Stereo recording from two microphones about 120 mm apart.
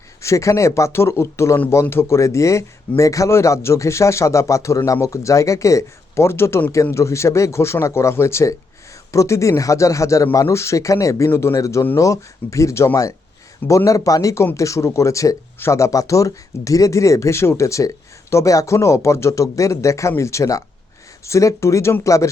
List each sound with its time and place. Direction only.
0.2 s speech: 25° left (ahead or behind)